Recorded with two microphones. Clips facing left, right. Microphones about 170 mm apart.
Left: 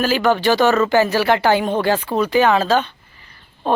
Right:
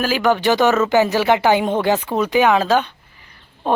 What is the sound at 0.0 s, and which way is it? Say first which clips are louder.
A man's voice: left 1 dB; 10° right (ahead or behind).